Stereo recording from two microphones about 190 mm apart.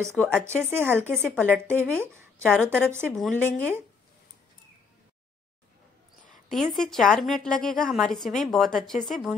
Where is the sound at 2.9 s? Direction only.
15° right (ahead or behind).